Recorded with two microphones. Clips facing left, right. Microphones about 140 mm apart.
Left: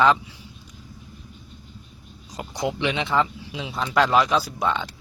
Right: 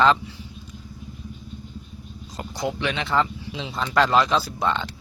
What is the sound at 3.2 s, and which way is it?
Speech, 5° left (ahead or behind).